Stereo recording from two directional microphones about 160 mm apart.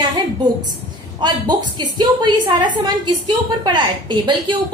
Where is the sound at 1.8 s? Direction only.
25° right (ahead or behind).